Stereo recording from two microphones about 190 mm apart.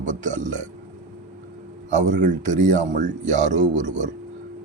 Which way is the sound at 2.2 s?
40° right (ahead or behind).